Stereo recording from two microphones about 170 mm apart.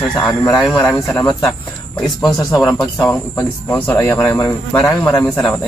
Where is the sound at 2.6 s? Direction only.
10° left (ahead or behind).